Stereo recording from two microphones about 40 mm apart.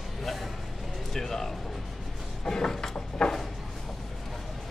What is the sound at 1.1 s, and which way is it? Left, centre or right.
Speech, centre.